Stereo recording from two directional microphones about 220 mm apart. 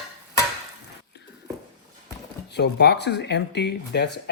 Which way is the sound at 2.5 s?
50° left (ahead or behind).